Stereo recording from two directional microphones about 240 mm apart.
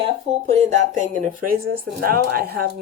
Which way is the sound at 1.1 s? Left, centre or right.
Right.